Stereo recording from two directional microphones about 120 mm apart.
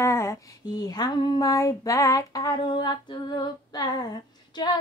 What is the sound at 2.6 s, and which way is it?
Female singing, 40° left (ahead or behind).